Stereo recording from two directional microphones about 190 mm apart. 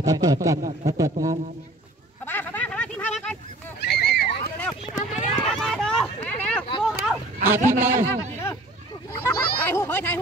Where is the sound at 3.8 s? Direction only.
60° left (ahead or behind).